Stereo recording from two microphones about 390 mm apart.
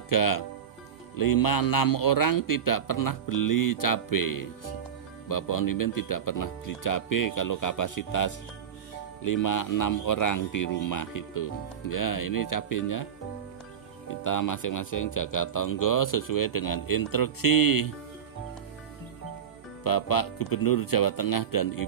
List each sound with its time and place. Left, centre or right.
0.1 s speech: left
19.8 s speech: left